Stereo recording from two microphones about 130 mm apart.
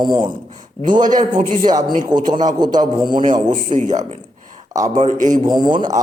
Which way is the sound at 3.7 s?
65° right (ahead or behind).